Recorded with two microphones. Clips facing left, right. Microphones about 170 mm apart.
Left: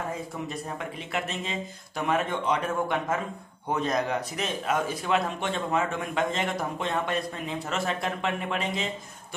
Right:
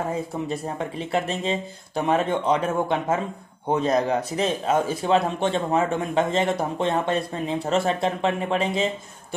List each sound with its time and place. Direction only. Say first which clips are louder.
0.5 s speech: right 6 dB; 30° right (ahead or behind)